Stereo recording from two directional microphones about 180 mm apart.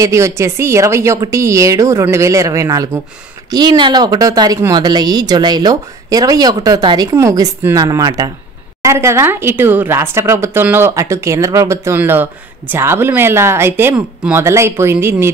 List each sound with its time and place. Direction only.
0.0 s a woman's voice: 15° right (ahead or behind)